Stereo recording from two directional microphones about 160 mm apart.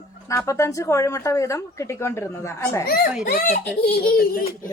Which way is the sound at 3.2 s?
65° left (ahead or behind).